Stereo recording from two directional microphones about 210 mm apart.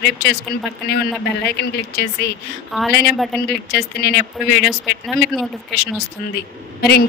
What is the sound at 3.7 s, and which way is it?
Speech, 50° left (ahead or behind).